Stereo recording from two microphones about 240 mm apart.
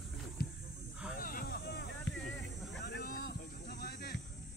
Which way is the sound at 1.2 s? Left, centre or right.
Left.